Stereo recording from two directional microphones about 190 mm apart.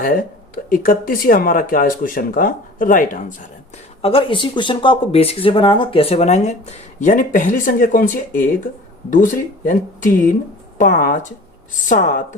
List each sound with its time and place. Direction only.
0.0 s speech: 50° left (ahead or behind)
4.0 s speech: 30° left (ahead or behind)